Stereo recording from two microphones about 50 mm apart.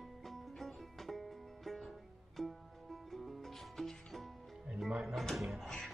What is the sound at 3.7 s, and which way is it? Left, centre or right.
Music, centre.